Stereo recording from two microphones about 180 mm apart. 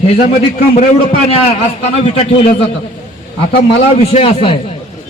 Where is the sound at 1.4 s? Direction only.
35° left (ahead or behind).